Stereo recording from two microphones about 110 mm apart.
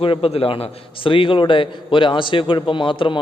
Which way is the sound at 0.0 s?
55° left (ahead or behind).